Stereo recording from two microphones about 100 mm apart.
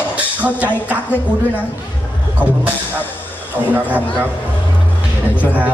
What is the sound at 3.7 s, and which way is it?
Speech, 15° right (ahead or behind).